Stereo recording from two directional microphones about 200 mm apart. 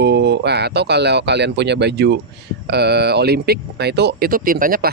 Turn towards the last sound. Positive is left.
turn(degrees=-45)  # may be behind; listen again after turning